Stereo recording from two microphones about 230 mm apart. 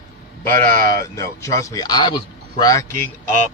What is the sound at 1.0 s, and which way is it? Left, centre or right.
A man's voice, centre.